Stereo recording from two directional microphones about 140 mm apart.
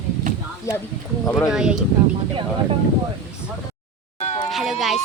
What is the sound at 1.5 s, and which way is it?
Speech, 5° right (ahead or behind).